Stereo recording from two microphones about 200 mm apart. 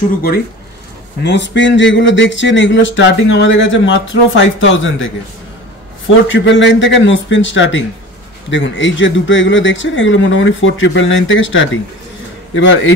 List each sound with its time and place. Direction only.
1.2 s speech: 60° left (ahead or behind)